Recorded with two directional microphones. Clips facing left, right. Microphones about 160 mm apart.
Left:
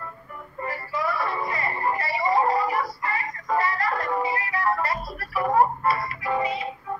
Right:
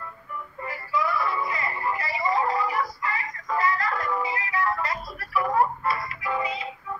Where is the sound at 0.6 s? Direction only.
35° left (ahead or behind).